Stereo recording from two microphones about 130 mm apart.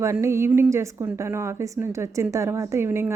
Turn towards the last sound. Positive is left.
turn(degrees=-20)  # may be behind; listen again after turning